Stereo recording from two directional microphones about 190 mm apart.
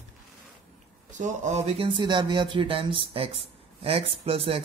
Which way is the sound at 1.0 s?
40° right (ahead or behind).